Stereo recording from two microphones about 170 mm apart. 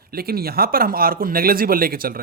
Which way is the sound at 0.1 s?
65° right (ahead or behind).